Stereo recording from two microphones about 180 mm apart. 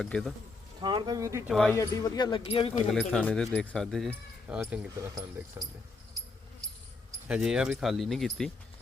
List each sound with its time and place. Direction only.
0.0 s speech: 5° left (ahead or behind)
0.8 s speech: 25° right (ahead or behind)
1.5 s speech: centre (ahead or behind)
1.7 s speech: 20° left (ahead or behind)
2.9 s speech: 5° left (ahead or behind)
4.9 s speech: 20° right (ahead or behind)
7.3 s speech: 5° right (ahead or behind)